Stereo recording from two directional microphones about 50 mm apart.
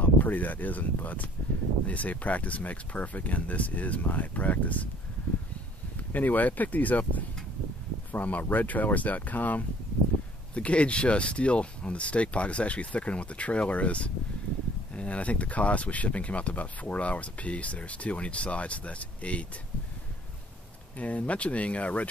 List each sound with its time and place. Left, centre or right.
0.0 s speech: left
5.9 s speech: left
21.0 s speech: left